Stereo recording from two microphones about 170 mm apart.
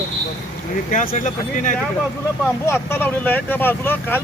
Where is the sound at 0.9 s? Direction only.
50° left (ahead or behind).